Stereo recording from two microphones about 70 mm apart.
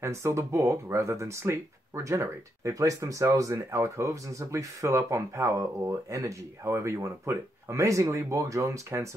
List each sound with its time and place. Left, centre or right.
0.0 s speech: right